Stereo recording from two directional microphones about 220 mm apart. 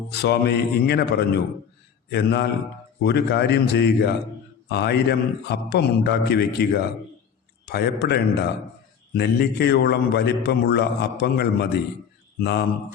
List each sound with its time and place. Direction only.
0.1 s a man's voice: 50° left (ahead or behind)